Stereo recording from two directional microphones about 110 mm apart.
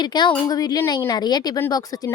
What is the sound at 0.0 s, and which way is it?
Speech, 40° left (ahead or behind).